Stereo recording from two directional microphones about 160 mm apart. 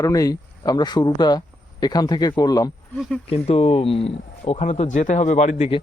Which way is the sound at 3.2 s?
40° left (ahead or behind).